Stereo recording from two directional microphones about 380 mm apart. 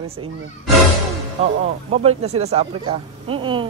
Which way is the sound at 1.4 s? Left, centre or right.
Centre.